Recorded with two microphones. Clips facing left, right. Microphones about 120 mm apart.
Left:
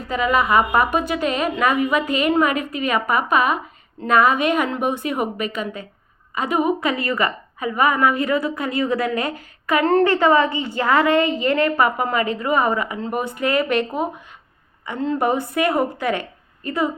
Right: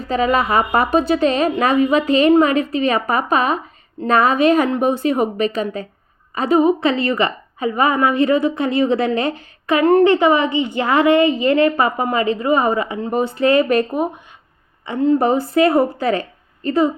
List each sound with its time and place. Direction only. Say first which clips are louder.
0.1 s a woman's voice: right 2 dB; 35° right (ahead or behind)